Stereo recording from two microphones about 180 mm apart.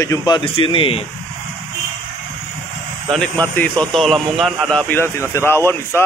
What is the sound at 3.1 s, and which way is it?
Speech, 5° left (ahead or behind).